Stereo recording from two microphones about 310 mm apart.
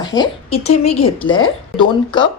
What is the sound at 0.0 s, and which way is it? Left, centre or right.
Speech, centre.